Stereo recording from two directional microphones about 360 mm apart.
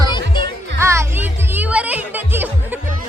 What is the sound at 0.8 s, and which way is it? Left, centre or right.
Music, centre.